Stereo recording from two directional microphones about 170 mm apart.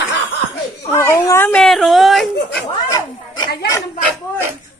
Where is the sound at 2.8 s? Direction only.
20° left (ahead or behind).